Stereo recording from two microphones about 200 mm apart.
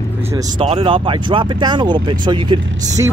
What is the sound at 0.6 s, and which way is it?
A man's voice, 25° right (ahead or behind).